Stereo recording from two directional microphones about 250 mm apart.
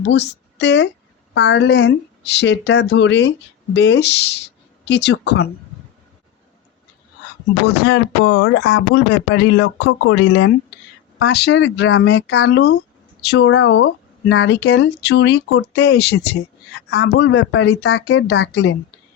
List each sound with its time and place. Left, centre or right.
0.0 s speech: left
7.6 s speech: left